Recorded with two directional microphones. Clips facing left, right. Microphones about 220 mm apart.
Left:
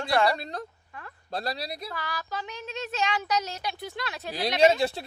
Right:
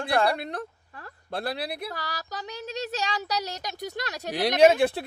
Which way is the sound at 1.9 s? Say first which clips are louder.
Left 1 dB; 40° right (ahead or behind).